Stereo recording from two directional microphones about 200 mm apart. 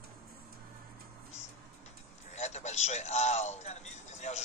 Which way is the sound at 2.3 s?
35° left (ahead or behind).